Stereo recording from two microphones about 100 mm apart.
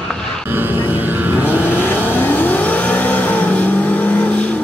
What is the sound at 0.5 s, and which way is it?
Vehicle, 20° right (ahead or behind).